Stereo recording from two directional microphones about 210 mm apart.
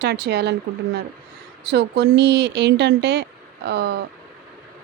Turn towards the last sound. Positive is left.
turn(degrees=-50)  # may be behind; listen again after turning